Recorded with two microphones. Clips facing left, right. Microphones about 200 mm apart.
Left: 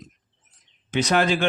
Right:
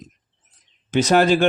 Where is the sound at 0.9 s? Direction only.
40° right (ahead or behind).